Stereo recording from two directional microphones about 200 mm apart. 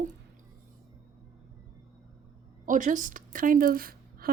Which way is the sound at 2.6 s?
40° right (ahead or behind).